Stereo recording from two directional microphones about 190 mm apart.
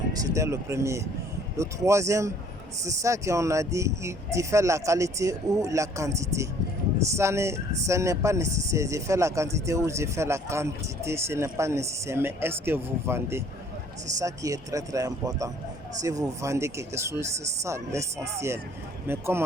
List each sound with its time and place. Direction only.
0.3 s speech: 15° right (ahead or behind)